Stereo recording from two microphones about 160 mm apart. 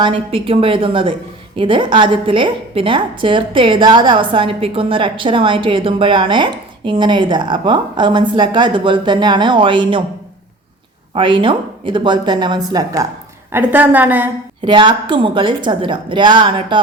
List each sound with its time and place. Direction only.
0.0 s a woman's voice: 35° right (ahead or behind)
11.1 s a woman's voice: 30° right (ahead or behind)
13.5 s a woman's voice: 10° right (ahead or behind)
14.6 s a woman's voice: 30° right (ahead or behind)